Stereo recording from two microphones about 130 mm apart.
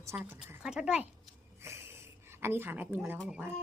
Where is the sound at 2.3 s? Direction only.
20° right (ahead or behind).